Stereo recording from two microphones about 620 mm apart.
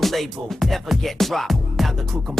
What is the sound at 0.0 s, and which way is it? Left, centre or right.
Music, centre.